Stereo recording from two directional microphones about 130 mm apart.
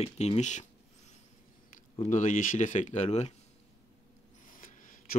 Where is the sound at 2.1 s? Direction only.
75° left (ahead or behind); by 3.3 s 60° left (ahead or behind).